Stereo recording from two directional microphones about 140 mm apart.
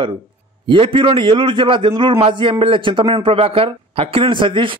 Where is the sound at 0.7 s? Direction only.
40° right (ahead or behind).